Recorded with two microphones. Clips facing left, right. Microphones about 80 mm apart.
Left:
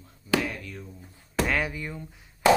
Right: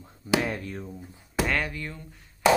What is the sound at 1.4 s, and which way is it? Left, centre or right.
Speech, centre.